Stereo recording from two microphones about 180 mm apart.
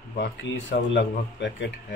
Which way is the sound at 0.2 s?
85° left.